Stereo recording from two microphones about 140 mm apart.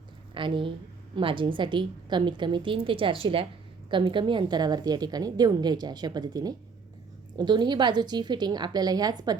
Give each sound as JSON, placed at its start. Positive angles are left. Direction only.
{"t": 0.3, "sound": "a woman's voice", "side_deg": -35}